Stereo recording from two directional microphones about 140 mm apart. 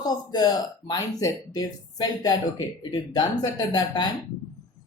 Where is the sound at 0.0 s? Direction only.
30° left (ahead or behind).